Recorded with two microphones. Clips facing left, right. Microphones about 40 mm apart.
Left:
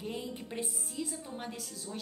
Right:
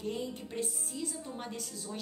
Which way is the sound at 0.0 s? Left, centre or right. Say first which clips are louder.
Right 2 dB; centre.